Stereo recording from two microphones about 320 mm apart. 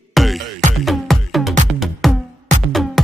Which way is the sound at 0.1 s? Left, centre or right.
Centre.